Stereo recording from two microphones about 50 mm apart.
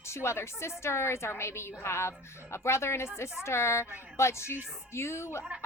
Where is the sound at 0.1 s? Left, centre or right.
Left.